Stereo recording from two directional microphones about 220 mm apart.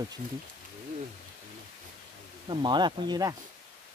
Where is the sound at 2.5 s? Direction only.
20° right (ahead or behind).